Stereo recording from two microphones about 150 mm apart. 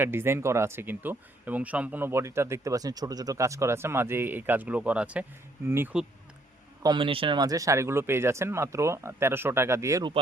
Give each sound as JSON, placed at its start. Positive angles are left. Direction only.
{"t": 0.0, "sound": "speech", "side_deg": -15}
{"t": 6.8, "sound": "speech", "side_deg": -35}